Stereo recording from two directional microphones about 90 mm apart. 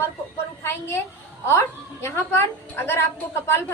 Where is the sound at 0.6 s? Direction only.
30° left (ahead or behind).